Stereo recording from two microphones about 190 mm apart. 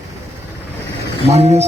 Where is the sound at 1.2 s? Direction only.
35° right (ahead or behind).